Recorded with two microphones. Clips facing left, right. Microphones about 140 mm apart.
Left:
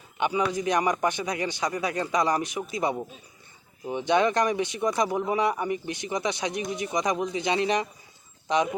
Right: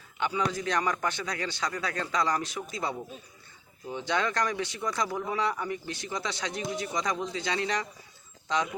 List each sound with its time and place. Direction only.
0.2 s speech: 15° left (ahead or behind)